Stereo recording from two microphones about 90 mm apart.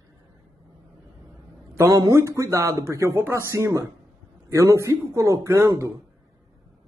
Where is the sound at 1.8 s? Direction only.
35° right (ahead or behind).